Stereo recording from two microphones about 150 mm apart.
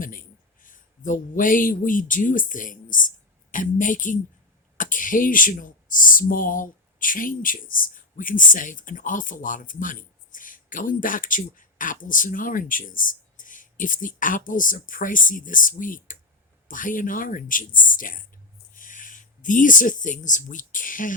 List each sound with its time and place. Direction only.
0.0 s a man's voice: 65° left (ahead or behind)